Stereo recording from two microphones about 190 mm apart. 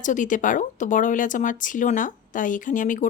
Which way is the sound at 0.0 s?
40° left (ahead or behind).